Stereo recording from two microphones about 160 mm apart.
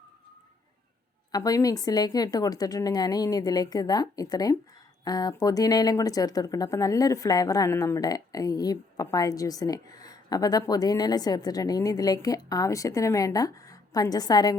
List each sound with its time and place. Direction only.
1.3 s speech: 20° left (ahead or behind)